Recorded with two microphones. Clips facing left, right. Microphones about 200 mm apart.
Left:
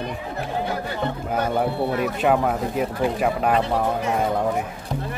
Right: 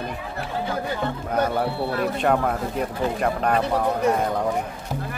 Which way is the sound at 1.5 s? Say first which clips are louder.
Left 2 dB; 15° left (ahead or behind).